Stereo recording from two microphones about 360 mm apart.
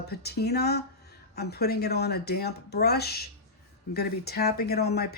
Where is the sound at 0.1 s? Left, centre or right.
Left.